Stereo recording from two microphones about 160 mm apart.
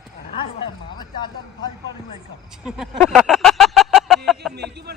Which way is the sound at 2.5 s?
5° right (ahead or behind).